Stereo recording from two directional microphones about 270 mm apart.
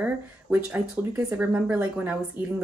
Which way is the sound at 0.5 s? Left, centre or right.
Centre.